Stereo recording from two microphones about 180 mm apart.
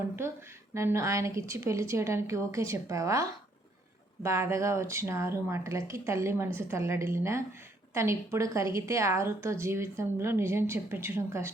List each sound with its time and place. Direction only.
0.7 s a woman's voice: 15° right (ahead or behind)